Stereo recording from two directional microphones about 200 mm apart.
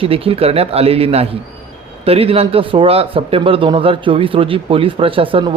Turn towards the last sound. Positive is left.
turn(degrees=-25)  # may be behind; listen again after turning